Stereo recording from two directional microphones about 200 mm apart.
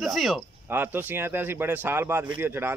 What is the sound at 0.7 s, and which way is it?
Speech, 10° right (ahead or behind).